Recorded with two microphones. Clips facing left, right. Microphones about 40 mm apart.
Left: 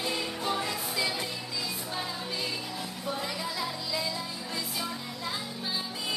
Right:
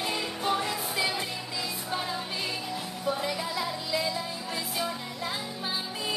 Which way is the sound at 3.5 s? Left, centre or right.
Centre.